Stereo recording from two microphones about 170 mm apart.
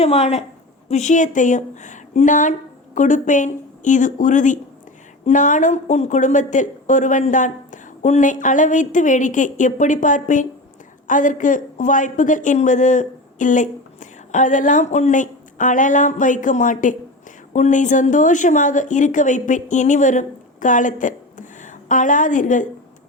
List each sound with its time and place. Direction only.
0.0 s speech: 40° left (ahead or behind)